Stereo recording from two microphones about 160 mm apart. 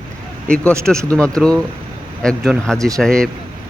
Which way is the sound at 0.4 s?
5° left (ahead or behind).